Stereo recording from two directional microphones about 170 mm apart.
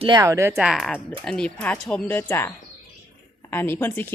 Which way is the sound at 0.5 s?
5° right (ahead or behind).